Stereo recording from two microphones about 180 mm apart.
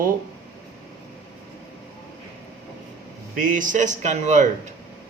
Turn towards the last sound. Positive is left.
turn(degrees=-40)  # may be behind; listen again after turning